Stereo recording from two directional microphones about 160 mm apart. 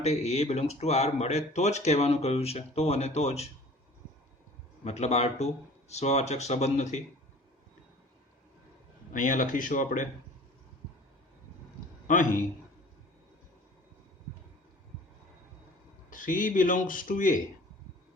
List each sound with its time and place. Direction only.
0.0 s speech: 40° left (ahead or behind)
4.8 s speech: 45° left (ahead or behind)
9.1 s a man's voice: 55° left (ahead or behind)
12.0 s a man's voice: 55° left (ahead or behind)
16.0 s a man's voice: 55° left (ahead or behind)